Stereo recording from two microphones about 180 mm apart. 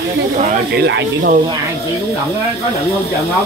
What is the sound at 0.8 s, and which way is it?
Speech, 80° right.